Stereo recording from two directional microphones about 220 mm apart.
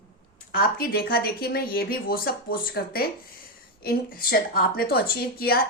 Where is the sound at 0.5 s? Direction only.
40° left (ahead or behind).